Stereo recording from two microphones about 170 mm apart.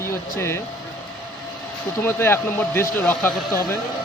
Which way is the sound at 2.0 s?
15° left (ahead or behind).